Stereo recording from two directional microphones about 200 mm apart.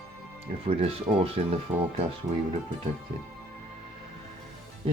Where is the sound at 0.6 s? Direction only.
30° right (ahead or behind).